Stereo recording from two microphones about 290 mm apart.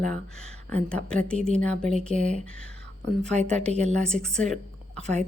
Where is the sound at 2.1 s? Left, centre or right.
Right.